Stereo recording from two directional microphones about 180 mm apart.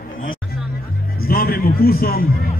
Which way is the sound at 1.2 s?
55° left (ahead or behind).